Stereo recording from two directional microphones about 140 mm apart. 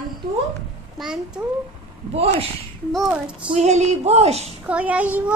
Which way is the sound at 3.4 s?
50° right (ahead or behind).